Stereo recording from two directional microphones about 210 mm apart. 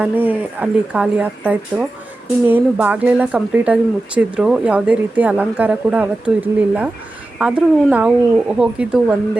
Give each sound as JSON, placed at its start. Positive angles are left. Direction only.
{"t": 0.0, "sound": "a woman's voice", "side_deg": -10}